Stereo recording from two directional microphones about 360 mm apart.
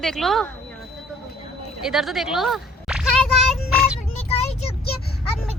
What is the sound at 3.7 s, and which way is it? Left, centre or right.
Child singing, centre.